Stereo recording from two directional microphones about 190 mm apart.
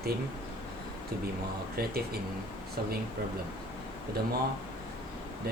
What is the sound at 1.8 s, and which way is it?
Speech, 55° right (ahead or behind).